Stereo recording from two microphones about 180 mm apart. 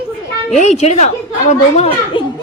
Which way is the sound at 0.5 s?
40° left (ahead or behind).